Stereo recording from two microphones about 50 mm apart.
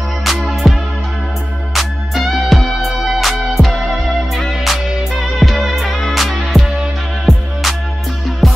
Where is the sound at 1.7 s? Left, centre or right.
Centre.